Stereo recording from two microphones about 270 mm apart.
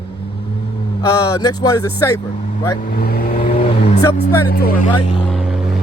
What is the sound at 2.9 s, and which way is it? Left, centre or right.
Vehicle, left.